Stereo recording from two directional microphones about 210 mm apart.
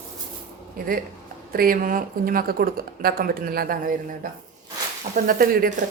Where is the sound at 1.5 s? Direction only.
45° right (ahead or behind).